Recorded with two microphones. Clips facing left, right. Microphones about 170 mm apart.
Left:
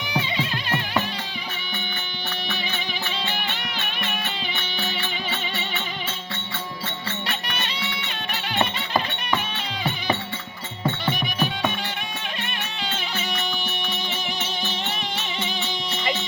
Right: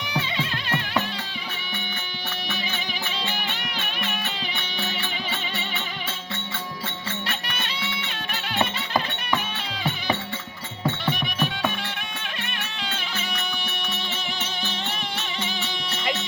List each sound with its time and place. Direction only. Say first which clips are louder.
0.3 s music: left 1 dB; centre (ahead or behind)
8.5 s music: left 1 dB; centre (ahead or behind)
10.8 s music: left 1 dB; centre (ahead or behind)
12.8 s music: left 3 dB; centre (ahead or behind)
16.0 s music: left 1 dB; centre (ahead or behind)